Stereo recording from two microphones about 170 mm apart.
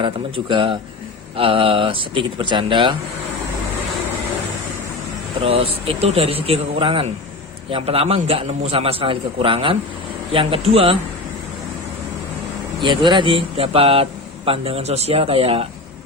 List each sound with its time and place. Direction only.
0.0 s speech: 30° right (ahead or behind)
5.4 s speech: 35° right (ahead or behind)
12.8 s speech: 30° right (ahead or behind)